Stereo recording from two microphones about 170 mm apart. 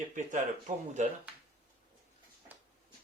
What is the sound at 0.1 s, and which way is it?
Speech, 50° right (ahead or behind).